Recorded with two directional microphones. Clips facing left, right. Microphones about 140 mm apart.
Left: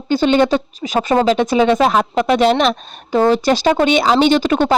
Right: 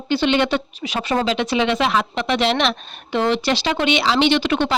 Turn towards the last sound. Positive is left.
turn(degrees=45)  # may be behind; listen again after turning